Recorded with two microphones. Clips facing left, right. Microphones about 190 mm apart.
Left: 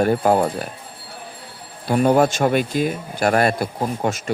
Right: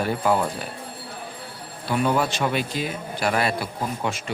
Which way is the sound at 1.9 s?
45° left (ahead or behind).